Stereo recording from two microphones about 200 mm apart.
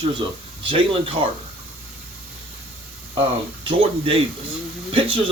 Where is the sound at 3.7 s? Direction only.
30° right (ahead or behind).